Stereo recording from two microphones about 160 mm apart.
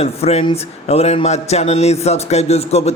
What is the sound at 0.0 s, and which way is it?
Speech, 40° left (ahead or behind).